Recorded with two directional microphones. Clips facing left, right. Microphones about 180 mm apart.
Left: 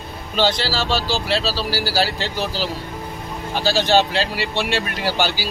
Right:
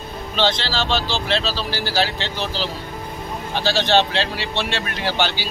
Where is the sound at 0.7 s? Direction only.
5° left (ahead or behind).